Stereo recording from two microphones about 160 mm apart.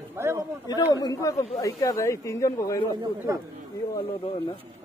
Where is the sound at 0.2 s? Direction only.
15° right (ahead or behind).